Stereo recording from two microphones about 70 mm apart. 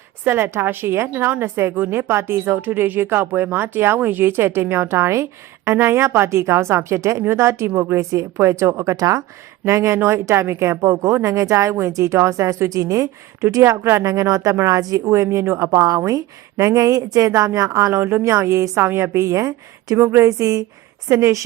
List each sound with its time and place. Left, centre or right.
0.3 s a woman's voice: right
9.6 s a woman's voice: right
20.0 s a woman's voice: right
20.2 s speech: right